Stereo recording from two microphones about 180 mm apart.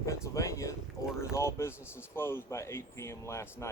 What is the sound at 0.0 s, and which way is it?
Speech, 15° left (ahead or behind).